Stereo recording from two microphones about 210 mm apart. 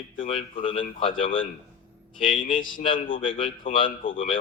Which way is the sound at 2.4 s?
40° left (ahead or behind).